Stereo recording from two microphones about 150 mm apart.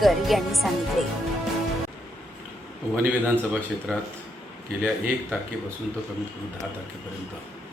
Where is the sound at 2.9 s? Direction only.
10° right (ahead or behind).